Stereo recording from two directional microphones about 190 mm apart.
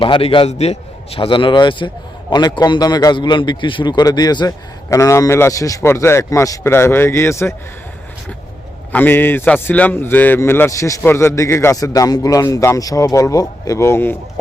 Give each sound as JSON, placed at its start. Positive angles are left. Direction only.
{"t": 0.0, "sound": "a man's voice", "side_deg": 30}
{"t": 8.9, "sound": "a man's voice", "side_deg": 10}